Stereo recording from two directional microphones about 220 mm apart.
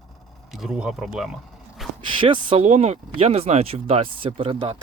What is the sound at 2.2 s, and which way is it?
Speech, 25° right (ahead or behind).